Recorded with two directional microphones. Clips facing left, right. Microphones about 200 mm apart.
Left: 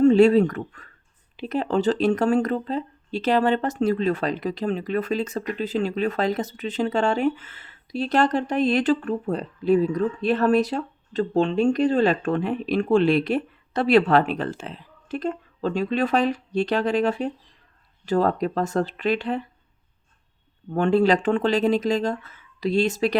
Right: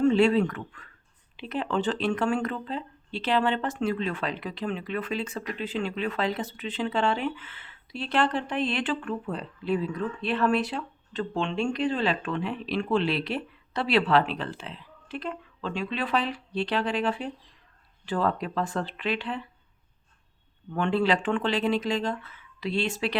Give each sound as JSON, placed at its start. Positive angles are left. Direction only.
{"t": 0.0, "sound": "speech", "side_deg": 40}
{"t": 20.7, "sound": "speech", "side_deg": 45}